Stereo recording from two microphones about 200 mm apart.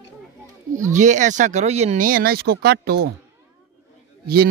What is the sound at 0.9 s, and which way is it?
Speech, 40° right (ahead or behind).